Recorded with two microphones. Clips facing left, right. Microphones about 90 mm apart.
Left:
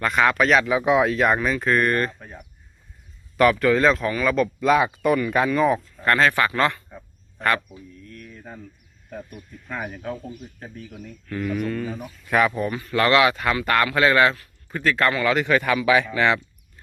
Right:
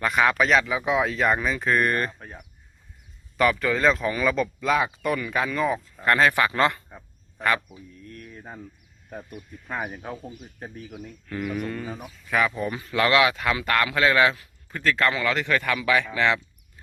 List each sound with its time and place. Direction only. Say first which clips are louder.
0.0 s speech: left 2 dB; 5° right (ahead or behind)
0.7 s speech: left 5 dB; 25° left (ahead or behind)
1.0 s speech: left 3 dB; 5° left (ahead or behind); by 2.1 s 15° right (ahead or behind)
3.3 s speech: left 5 dB; centre (ahead or behind)
4.6 s speech: left 5 dB; 15° left (ahead or behind)
6.1 s speech: left 1 dB; 15° right (ahead or behind)
7.3 s a man's voice: left 2 dB; 5° right (ahead or behind)
7.7 s speech: left 1 dB; 20° right (ahead or behind)
12.3 s speech: left 4 dB; 10° left (ahead or behind)
12.6 s speech: left 3 dB; 15° right (ahead or behind)
12.9 s speech: left 2 dB; centre (ahead or behind)